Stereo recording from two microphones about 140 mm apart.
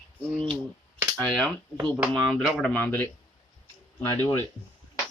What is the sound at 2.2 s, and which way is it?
Speech, centre (ahead or behind).